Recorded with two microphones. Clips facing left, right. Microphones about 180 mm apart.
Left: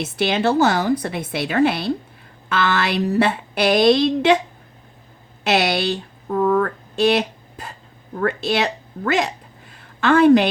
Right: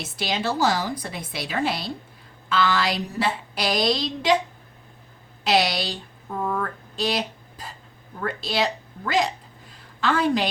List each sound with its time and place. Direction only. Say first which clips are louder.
0.0 s a woman's voice: left 8 dB; 60° left (ahead or behind)
5.4 s a woman's voice: left 3 dB; 65° left (ahead or behind)
8.2 s speech: left 5 dB; 65° left (ahead or behind)